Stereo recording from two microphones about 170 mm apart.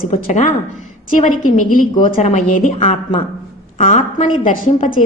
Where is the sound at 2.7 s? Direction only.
40° left (ahead or behind).